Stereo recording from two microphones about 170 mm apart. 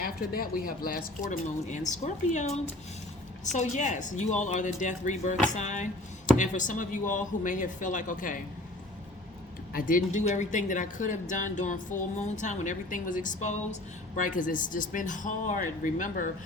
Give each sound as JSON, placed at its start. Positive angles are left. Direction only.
{"t": 0.0, "sound": "a woman's voice", "side_deg": 60}
{"t": 9.7, "sound": "a woman's voice", "side_deg": 55}